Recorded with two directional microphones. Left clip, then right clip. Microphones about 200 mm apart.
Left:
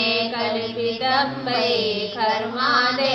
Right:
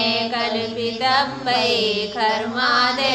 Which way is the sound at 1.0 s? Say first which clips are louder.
Right 4 dB; 45° right (ahead or behind).